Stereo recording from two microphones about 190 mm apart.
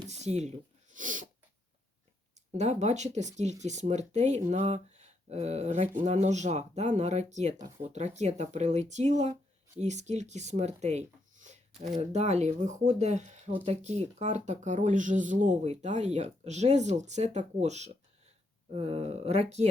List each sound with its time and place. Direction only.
0.1 s speech: 35° right (ahead or behind)
0.9 s snort: 45° right (ahead or behind)
2.6 s speech: 35° right (ahead or behind)